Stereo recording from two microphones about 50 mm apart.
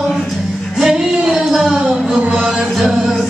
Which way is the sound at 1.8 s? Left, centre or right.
Centre.